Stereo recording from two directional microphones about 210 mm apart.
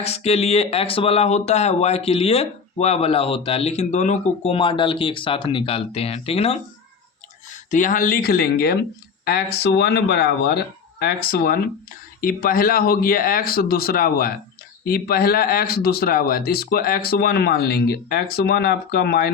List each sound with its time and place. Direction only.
0.0 s speech: 30° left (ahead or behind)
7.7 s speech: 40° left (ahead or behind)